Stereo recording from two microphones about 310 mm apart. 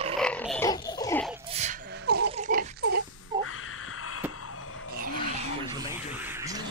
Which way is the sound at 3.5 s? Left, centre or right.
Left.